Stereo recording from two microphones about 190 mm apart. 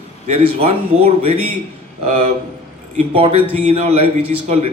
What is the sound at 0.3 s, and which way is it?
A man's voice, 30° right (ahead or behind).